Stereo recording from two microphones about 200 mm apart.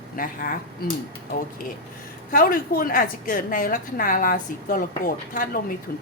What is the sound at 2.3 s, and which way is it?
A woman's voice, 45° left (ahead or behind).